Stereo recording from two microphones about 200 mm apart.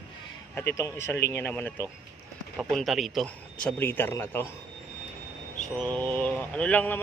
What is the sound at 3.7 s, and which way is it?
Speech, 10° left (ahead or behind).